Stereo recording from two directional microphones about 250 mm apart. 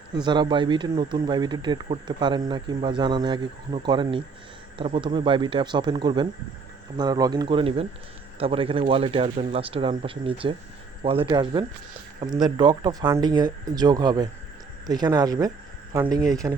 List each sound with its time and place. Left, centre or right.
0.3 s speech: centre